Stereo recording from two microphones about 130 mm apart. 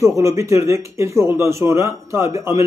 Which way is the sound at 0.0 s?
20° right (ahead or behind).